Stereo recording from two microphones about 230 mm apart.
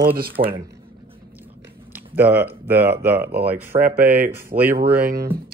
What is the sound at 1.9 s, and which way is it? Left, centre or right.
Speech, centre.